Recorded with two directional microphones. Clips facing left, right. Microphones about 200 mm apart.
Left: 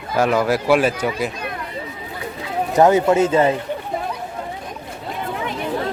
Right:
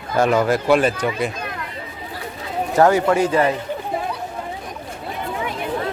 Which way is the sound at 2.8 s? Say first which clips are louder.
Left 1 dB; 20° left (ahead or behind).